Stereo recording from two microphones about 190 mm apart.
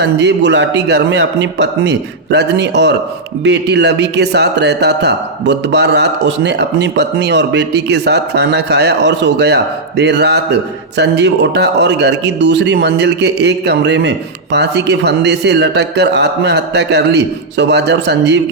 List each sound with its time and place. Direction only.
0.0 s speech: 65° right (ahead or behind)